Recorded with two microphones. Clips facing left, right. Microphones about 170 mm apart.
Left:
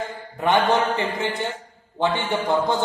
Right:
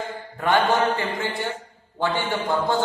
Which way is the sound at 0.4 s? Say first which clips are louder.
Left 1 dB; 20° left (ahead or behind).